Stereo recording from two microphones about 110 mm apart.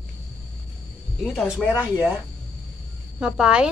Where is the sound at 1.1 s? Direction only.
5° right (ahead or behind).